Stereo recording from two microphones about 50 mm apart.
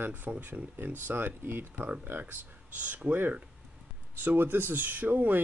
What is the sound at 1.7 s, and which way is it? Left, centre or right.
Speech, right.